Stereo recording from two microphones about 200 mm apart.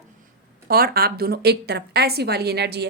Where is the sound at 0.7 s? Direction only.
50° right (ahead or behind).